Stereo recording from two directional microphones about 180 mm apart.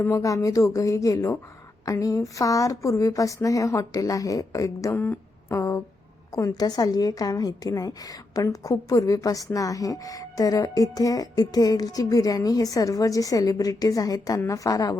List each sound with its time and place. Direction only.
0.0 s a woman's voice: 15° left (ahead or behind)